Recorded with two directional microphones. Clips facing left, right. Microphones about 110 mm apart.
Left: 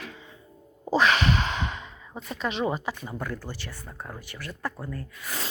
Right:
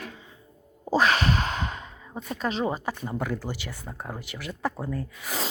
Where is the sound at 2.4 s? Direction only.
35° right (ahead or behind).